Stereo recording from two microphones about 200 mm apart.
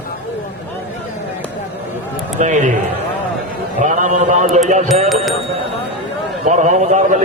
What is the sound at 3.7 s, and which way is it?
Speech, 40° right (ahead or behind).